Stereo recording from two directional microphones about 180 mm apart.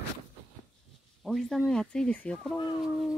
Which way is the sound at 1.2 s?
Centre (ahead or behind).